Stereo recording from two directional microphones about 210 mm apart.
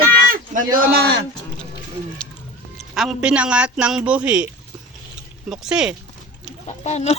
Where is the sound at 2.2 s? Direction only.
5° left (ahead or behind).